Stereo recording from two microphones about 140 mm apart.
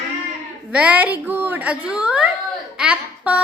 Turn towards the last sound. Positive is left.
turn(degrees=-10)  # may be behind; listen again after turning